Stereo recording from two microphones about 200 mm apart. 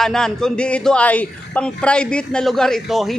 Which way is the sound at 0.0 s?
5° left (ahead or behind).